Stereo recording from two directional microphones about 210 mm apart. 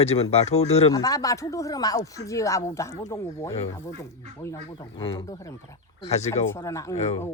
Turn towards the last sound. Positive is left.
turn(degrees=30)  # may be behind; listen again after turning